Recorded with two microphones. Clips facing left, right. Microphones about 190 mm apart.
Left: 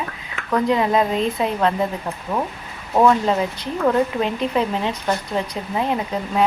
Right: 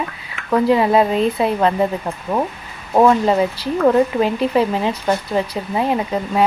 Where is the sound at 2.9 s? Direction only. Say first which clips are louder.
Right 3 dB; 25° right (ahead or behind).